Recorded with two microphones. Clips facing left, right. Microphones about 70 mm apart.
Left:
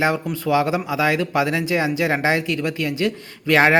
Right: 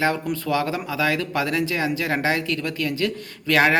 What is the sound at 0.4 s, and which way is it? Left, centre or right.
Speech, centre.